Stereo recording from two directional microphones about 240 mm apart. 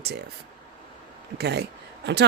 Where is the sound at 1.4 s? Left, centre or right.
Right.